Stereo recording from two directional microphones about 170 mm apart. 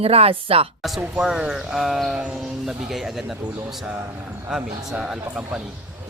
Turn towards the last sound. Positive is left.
turn(degrees=-5)  # may be behind; listen again after turning